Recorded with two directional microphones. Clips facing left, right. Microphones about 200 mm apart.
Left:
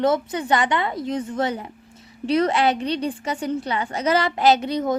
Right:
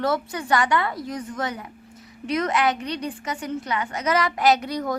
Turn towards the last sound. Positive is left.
turn(degrees=25)  # may be behind; listen again after turning